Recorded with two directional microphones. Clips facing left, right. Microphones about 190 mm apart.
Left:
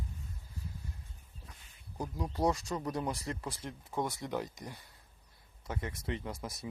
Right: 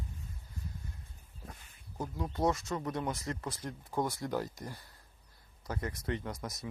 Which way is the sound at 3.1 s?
30° left (ahead or behind).